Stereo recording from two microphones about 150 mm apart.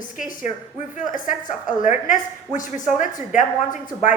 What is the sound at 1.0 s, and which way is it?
A woman's voice, 60° left (ahead or behind).